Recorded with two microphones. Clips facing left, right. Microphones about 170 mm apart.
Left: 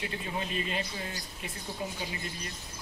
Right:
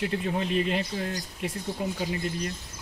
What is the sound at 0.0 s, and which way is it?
Speech, 60° right (ahead or behind).